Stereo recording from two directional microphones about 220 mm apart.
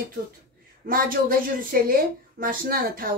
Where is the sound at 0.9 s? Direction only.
40° right (ahead or behind).